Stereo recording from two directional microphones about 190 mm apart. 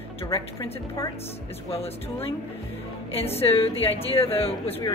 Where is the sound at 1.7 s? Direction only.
30° left (ahead or behind).